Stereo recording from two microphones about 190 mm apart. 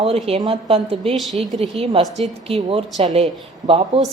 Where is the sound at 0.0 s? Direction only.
30° right (ahead or behind).